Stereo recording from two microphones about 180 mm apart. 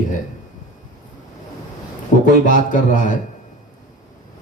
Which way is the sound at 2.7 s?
45° left (ahead or behind).